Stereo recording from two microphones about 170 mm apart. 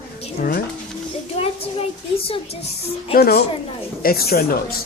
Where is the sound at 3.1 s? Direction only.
65° left (ahead or behind).